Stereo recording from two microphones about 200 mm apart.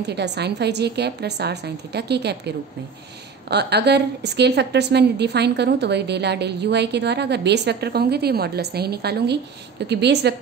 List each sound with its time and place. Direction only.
0.0 s a woman's voice: 55° right (ahead or behind)